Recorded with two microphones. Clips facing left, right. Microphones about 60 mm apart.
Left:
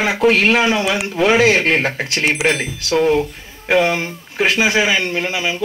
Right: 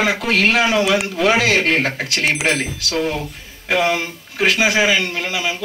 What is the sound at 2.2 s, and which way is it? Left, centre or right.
Speech, centre.